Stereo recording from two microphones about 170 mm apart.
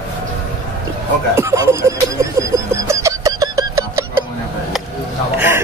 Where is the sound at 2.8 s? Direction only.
15° right (ahead or behind).